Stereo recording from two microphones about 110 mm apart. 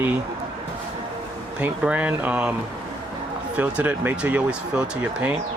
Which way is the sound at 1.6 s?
10° right (ahead or behind).